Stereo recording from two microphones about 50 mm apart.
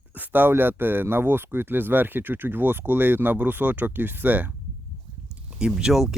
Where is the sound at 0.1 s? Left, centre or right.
Right.